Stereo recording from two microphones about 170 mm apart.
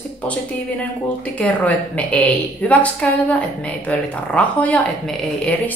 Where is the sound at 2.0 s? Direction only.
10° left (ahead or behind).